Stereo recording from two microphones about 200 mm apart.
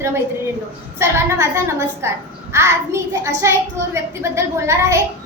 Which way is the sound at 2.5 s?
15° right (ahead or behind).